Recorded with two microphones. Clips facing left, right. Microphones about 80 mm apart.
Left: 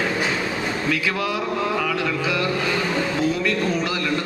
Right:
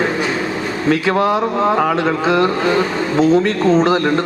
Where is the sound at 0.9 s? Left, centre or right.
Right.